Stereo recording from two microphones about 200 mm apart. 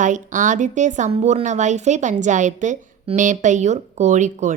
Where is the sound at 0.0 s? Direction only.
40° right (ahead or behind).